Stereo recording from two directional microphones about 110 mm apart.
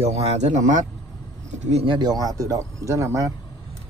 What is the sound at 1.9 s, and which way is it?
Speech, 40° right (ahead or behind).